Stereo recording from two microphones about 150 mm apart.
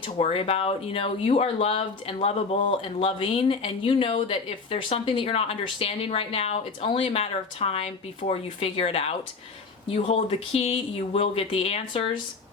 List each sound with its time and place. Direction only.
0.2 s speech: 40° left (ahead or behind)